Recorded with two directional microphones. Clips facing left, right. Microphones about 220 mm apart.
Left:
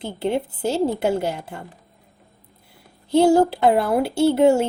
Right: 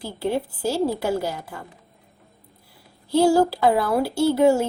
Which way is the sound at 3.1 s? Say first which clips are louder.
Left 2 dB; 20° left (ahead or behind).